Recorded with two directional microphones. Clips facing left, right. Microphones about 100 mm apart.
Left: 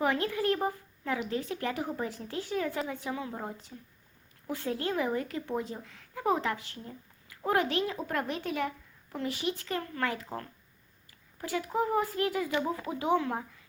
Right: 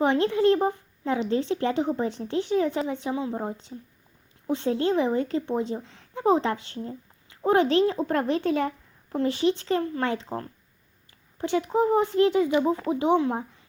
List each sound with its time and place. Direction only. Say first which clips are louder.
0.0 s speech: right 8 dB; 25° right (ahead or behind)